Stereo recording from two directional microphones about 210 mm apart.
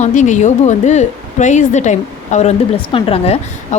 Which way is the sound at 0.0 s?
35° left (ahead or behind).